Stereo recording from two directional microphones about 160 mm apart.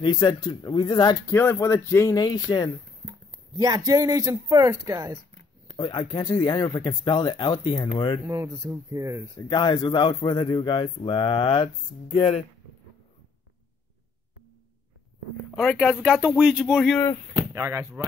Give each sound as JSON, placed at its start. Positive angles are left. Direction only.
{"t": 0.0, "sound": "speech", "side_deg": 25}
{"t": 1.3, "sound": "speech", "side_deg": 15}
{"t": 3.5, "sound": "speech", "side_deg": -25}
{"t": 5.8, "sound": "speech", "side_deg": 30}
{"t": 8.3, "sound": "speech", "side_deg": -20}
{"t": 9.5, "sound": "speech", "side_deg": 25}
{"t": 15.5, "sound": "speech", "side_deg": 0}
{"t": 17.5, "sound": "speech", "side_deg": -15}